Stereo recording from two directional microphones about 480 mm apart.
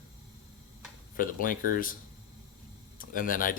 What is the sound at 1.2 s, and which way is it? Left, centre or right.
Speech, centre.